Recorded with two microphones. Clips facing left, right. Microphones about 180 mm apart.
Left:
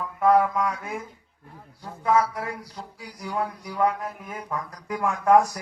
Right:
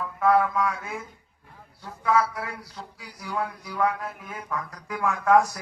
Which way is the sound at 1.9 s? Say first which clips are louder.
Left 1 dB; 30° left (ahead or behind).